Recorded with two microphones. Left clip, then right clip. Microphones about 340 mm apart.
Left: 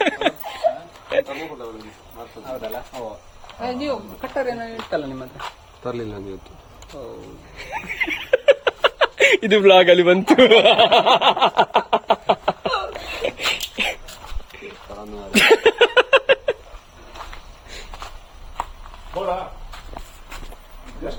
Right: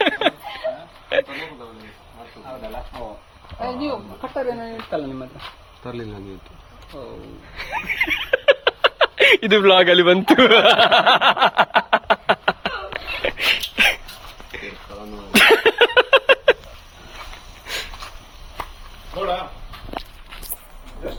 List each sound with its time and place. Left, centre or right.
0.0 s laughter: centre
1.1 s a sound: centre
3.6 s speech: centre
4.4 s speech: right
5.8 s speech: centre
7.5 s speech: centre
7.9 s a sound: centre